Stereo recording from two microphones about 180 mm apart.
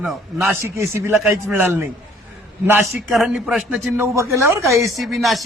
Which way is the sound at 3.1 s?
5° right (ahead or behind).